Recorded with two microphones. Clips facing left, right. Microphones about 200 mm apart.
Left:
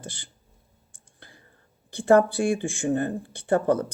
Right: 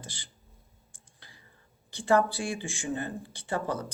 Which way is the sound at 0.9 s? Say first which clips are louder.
Left 7 dB; 55° left (ahead or behind).